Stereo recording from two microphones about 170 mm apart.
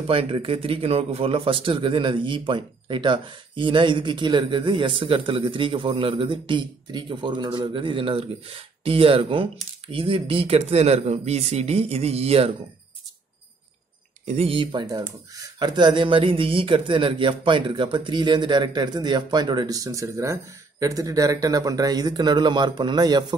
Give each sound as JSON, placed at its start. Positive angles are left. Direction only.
{"t": 0.1, "sound": "speech", "side_deg": -30}
{"t": 14.2, "sound": "speech", "side_deg": -40}